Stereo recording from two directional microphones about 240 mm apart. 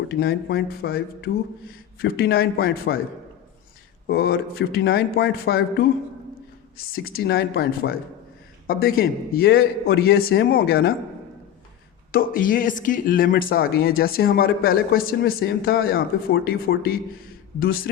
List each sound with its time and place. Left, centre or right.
0.2 s speech: left
4.0 s speech: left
6.9 s speech: left
12.1 s speech: left